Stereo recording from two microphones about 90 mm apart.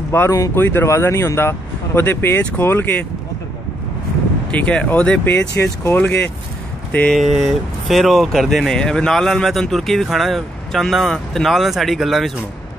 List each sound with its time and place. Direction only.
0.1 s speech: 30° left (ahead or behind)
4.5 s speech: 15° left (ahead or behind)
5.6 s speech: 30° left (ahead or behind)
7.1 s speech: centre (ahead or behind)